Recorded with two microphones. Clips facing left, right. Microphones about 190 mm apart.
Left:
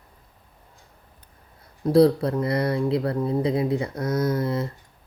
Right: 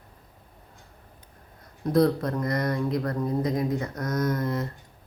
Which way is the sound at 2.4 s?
10° left (ahead or behind).